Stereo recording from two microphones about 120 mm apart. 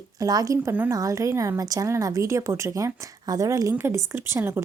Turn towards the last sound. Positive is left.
turn(degrees=-20)  # may be behind; listen again after turning